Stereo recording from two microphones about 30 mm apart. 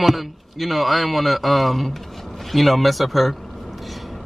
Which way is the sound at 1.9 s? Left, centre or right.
Centre.